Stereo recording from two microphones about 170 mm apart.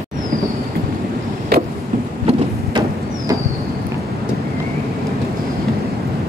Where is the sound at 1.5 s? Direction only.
65° right (ahead or behind).